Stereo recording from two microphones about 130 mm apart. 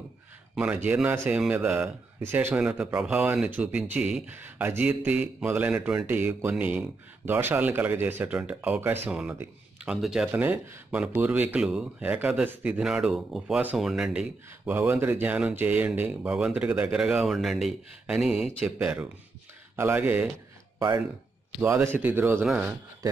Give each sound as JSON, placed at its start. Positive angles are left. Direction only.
{"t": 0.8, "sound": "speech", "side_deg": -10}
{"t": 10.3, "sound": "speech", "side_deg": -15}
{"t": 14.9, "sound": "speech", "side_deg": -15}
{"t": 19.7, "sound": "speech", "side_deg": -15}
{"t": 21.5, "sound": "speech", "side_deg": -15}